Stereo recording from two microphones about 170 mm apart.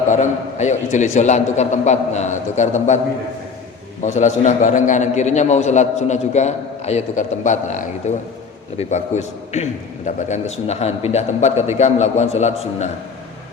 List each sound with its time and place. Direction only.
0.1 s a man's voice: 45° left (ahead or behind)
4.0 s a man's voice: 45° left (ahead or behind)